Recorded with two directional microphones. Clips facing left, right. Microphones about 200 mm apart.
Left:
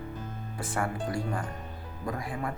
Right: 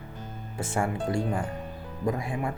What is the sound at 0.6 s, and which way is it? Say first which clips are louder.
Speech: right 3 dB; 25° right (ahead or behind).